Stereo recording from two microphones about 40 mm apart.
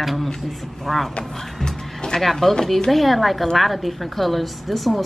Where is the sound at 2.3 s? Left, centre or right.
Centre.